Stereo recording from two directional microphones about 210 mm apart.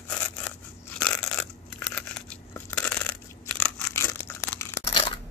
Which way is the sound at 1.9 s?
5° left (ahead or behind).